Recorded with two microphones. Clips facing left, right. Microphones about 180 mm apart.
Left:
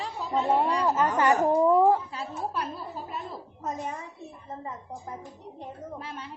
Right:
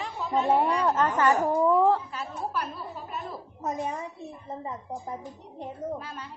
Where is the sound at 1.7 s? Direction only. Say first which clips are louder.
Even; 15° left (ahead or behind).